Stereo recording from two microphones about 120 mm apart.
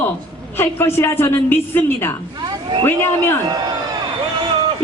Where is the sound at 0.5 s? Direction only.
20° left (ahead or behind).